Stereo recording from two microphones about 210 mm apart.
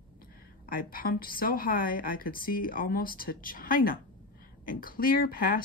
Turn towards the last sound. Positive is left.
turn(degrees=45)  # may be behind; listen again after turning